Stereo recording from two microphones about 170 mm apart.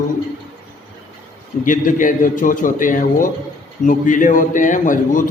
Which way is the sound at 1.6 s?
50° left (ahead or behind).